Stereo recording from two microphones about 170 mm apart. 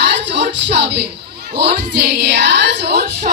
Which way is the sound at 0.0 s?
90° right.